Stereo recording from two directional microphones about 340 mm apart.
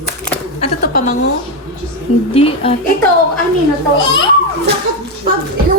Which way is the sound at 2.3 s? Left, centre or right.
Centre.